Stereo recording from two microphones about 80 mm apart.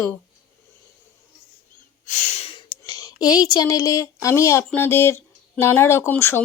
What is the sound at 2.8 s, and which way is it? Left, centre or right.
A woman's voice, left.